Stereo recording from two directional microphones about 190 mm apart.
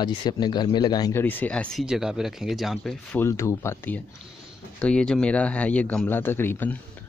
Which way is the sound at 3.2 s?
15° left (ahead or behind).